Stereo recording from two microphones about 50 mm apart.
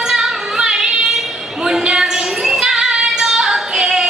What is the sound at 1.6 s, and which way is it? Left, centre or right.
Child singing, centre.